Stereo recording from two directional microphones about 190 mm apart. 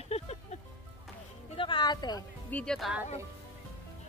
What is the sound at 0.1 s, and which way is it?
Music, 35° left (ahead or behind).